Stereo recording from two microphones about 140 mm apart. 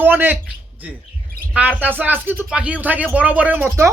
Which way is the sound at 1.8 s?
15° right (ahead or behind).